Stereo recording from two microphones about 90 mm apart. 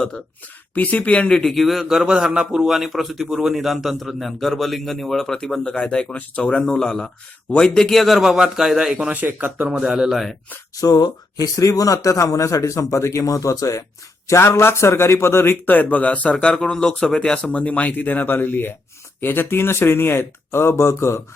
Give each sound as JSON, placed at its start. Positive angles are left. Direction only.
{"t": 0.7, "sound": "a man's voice", "side_deg": 20}
{"t": 9.7, "sound": "a man's voice", "side_deg": -5}
{"t": 10.8, "sound": "a man's voice", "side_deg": 40}